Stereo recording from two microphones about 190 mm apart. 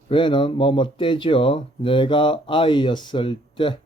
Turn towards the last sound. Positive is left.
turn(degrees=25)  # may be behind; listen again after turning